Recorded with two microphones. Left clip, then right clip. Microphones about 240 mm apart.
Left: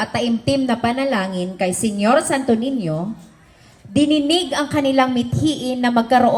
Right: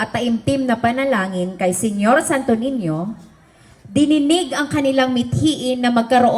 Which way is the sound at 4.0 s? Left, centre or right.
Right.